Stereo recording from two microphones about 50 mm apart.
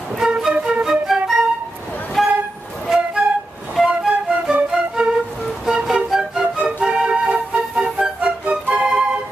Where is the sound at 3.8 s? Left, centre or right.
Centre.